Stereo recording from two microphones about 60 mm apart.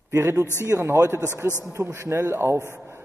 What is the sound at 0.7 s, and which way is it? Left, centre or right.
Speech, right.